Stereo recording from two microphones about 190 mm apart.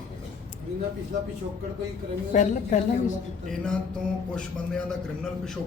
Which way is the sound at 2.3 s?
40° left (ahead or behind).